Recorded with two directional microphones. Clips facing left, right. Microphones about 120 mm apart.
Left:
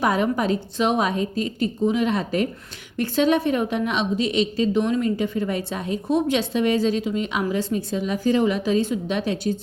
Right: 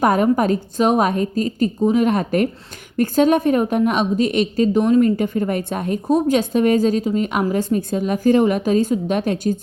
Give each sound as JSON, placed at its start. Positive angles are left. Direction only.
{"t": 0.0, "sound": "a woman's voice", "side_deg": -45}